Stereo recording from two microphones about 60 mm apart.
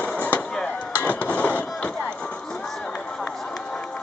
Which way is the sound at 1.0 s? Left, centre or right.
Left.